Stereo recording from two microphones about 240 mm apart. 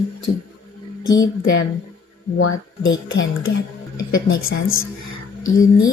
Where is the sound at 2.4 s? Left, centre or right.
Left.